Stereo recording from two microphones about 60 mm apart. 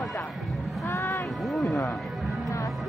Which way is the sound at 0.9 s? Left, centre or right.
Left.